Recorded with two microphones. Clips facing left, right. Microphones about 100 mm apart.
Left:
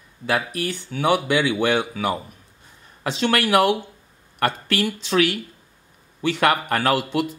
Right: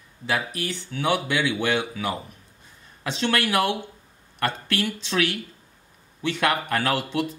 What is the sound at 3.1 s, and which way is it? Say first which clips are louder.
Speech: left 4 dB; 45° left (ahead or behind).